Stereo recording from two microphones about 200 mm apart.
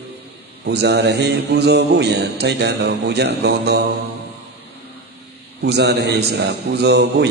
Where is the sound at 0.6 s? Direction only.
55° right (ahead or behind).